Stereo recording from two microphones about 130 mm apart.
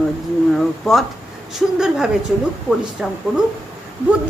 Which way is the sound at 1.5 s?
5° right (ahead or behind).